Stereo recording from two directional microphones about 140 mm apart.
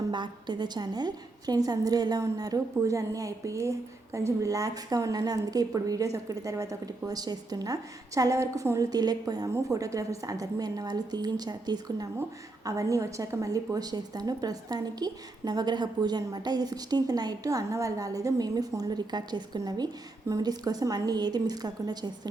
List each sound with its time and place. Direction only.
0.1 s a woman's voice: 30° right (ahead or behind)